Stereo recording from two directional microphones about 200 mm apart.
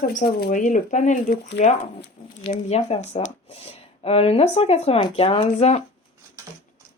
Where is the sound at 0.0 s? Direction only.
45° left (ahead or behind).